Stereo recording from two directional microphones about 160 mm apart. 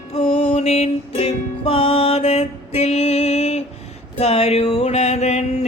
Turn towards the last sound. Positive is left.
turn(degrees=45)  # may be behind; listen again after turning